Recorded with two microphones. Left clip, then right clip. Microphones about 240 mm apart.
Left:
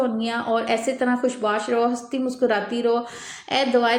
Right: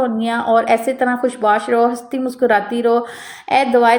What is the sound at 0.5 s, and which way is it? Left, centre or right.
A woman's voice, centre.